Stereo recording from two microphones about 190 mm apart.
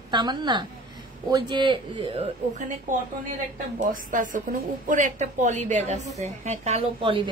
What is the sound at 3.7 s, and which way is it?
A woman's voice, 45° right (ahead or behind).